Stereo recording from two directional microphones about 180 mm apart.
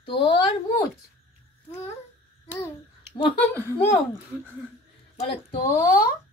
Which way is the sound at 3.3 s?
10° left (ahead or behind).